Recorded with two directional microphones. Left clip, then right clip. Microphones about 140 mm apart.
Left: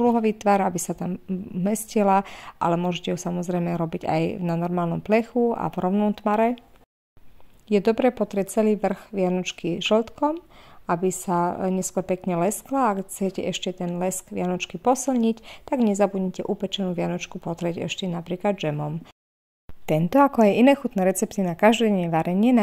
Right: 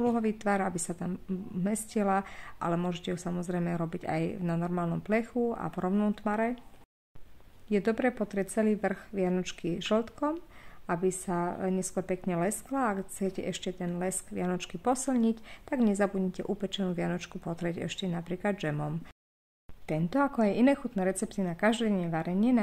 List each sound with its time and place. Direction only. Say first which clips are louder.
0.0 s a woman's voice: left 9 dB; 35° left (ahead or behind)
6.2 s a woman's voice: left 11 dB; 45° left (ahead or behind)
7.7 s a woman's voice: left 8 dB; 30° left (ahead or behind)
20.1 s a woman's voice: left 11 dB; 50° left (ahead or behind)